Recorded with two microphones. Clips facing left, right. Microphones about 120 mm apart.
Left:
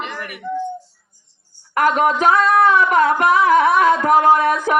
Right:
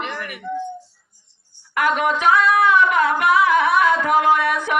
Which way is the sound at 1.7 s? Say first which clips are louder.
Left 3 dB; 40° left (ahead or behind).